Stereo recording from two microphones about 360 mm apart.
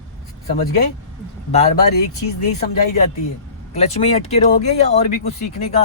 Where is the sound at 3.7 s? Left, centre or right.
Centre.